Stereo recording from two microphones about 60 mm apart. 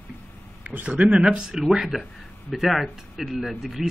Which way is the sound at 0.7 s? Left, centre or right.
Right.